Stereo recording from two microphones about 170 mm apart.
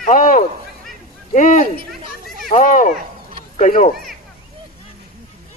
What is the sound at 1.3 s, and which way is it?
A man's voice, 45° left (ahead or behind).